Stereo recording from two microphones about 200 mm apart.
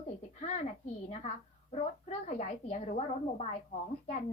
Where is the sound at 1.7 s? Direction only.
35° left (ahead or behind).